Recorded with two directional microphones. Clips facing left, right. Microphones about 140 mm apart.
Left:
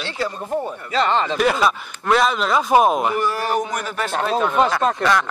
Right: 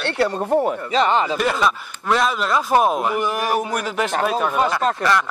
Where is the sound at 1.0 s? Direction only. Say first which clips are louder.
Right 1 dB; 15° right (ahead or behind).